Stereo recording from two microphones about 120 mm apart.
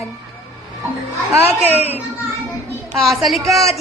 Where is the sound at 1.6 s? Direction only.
60° left (ahead or behind).